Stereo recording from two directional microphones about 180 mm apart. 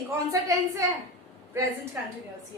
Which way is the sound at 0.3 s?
15° right (ahead or behind).